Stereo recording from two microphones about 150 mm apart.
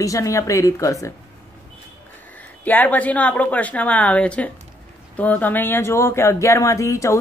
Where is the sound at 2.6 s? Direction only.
10° left (ahead or behind).